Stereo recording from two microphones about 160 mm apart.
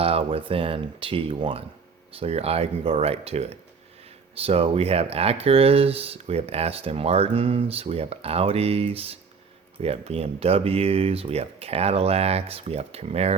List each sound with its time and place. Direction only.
0.0 s speech: 35° right (ahead or behind)